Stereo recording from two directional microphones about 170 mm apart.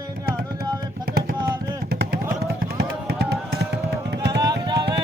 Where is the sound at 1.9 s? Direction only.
65° right (ahead or behind).